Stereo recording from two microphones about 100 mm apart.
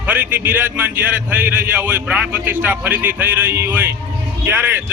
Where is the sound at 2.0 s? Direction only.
10° right (ahead or behind).